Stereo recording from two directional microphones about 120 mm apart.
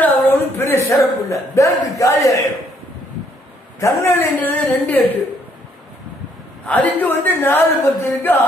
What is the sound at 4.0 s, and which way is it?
A woman's voice, 20° left (ahead or behind).